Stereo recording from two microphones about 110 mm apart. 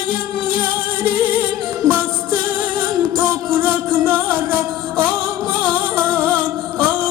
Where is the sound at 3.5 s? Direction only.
15° right (ahead or behind).